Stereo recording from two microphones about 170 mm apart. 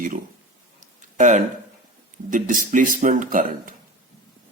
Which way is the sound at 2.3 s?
50° right (ahead or behind).